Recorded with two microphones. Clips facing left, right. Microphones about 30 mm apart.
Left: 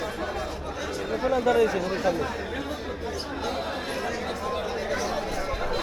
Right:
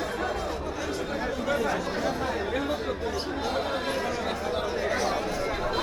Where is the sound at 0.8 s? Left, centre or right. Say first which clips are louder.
Left 6 dB; centre.